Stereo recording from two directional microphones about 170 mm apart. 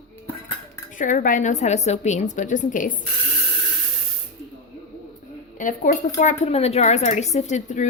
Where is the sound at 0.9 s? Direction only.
50° left (ahead or behind).